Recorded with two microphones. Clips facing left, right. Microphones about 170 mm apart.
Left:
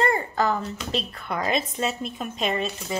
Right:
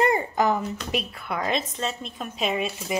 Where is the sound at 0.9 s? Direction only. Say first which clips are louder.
Left 1 dB; 5° right (ahead or behind).